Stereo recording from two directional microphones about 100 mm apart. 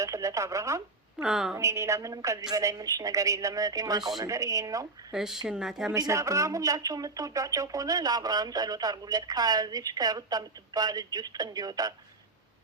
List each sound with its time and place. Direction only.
0.0 s telephone: 30° right (ahead or behind)
1.2 s speech: 5° right (ahead or behind)
1.5 s speech: 30° right (ahead or behind)
5.1 s speech: 5° right (ahead or behind)
5.9 s speech: 30° right (ahead or behind)